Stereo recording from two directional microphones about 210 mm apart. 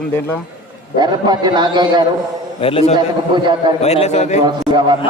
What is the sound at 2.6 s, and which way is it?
Speech, 25° left (ahead or behind).